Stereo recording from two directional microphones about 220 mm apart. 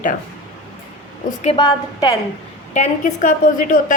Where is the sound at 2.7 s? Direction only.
35° left (ahead or behind).